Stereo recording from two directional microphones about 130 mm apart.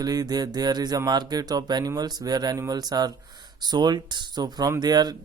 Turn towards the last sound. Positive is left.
turn(degrees=-30)  # may be behind; listen again after turning